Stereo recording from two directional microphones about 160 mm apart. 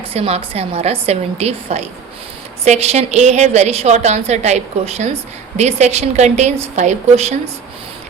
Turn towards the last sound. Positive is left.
turn(degrees=-45)  # may be behind; listen again after turning